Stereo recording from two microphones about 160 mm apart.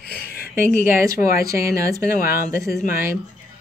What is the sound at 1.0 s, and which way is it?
Speech, 20° right (ahead or behind).